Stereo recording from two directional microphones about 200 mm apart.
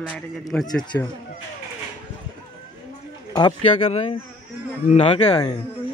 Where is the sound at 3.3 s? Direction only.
20° left (ahead or behind).